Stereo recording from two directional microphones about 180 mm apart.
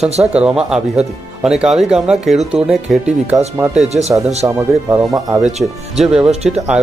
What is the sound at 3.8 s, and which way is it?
Speech, 35° right (ahead or behind).